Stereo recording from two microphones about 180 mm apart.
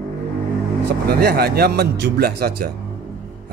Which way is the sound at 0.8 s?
60° right (ahead or behind).